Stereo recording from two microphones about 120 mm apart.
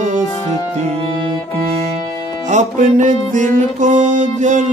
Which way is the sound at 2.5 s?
90° right.